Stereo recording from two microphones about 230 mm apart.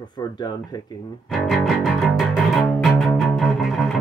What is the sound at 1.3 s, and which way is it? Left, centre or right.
Music, centre.